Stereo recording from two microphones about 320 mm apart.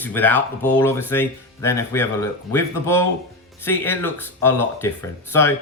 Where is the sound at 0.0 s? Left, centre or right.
Centre.